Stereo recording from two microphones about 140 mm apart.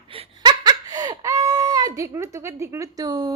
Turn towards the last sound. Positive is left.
turn(degrees=-30)  # may be behind; listen again after turning